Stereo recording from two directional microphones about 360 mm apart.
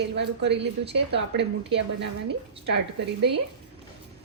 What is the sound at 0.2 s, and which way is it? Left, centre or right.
A woman's voice, right.